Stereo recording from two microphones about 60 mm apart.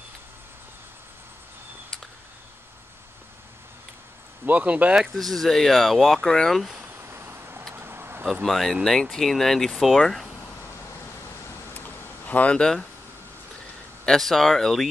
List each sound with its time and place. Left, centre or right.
4.5 s speech: right
5.0 s speech: centre
7.0 s vehicle: right
8.5 s speech: centre
11.7 s a sound: left
14.0 s speech: centre